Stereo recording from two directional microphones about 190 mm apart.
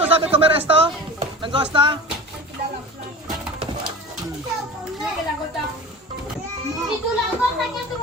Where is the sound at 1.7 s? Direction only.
25° right (ahead or behind).